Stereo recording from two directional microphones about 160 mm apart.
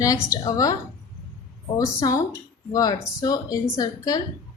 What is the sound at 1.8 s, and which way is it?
Speech, 20° left (ahead or behind).